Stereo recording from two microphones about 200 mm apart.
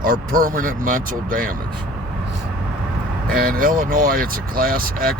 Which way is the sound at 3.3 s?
45° right (ahead or behind).